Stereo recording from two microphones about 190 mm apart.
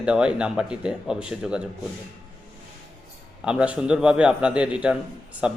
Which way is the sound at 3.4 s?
5° right (ahead or behind).